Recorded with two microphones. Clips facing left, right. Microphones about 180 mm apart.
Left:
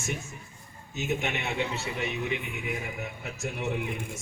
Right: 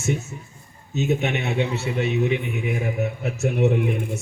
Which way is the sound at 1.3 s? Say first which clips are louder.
Right 7 dB; 70° right (ahead or behind).